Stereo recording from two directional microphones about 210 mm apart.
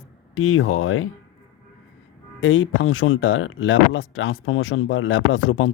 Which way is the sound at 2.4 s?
65° left (ahead or behind).